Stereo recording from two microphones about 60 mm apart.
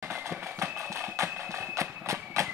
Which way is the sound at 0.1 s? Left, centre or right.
Right.